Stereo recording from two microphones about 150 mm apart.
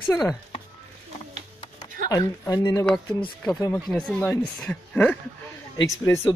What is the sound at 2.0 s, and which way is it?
Speech, 25° left (ahead or behind).